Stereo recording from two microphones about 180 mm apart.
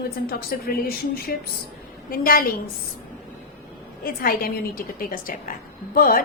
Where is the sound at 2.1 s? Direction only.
55° left (ahead or behind).